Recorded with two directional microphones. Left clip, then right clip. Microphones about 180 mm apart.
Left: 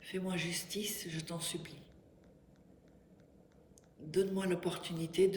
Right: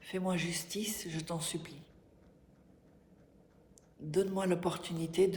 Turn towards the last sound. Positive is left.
turn(degrees=-20)  # may be behind; listen again after turning